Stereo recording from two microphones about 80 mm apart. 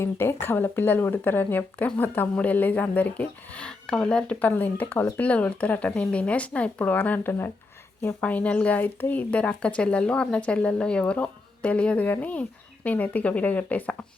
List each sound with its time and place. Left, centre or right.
0.0 s speech: left
8.2 s speech: centre